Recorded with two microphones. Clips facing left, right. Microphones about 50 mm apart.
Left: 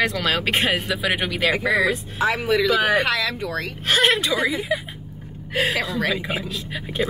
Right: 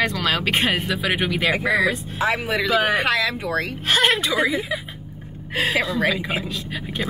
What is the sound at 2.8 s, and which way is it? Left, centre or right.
Speech, centre.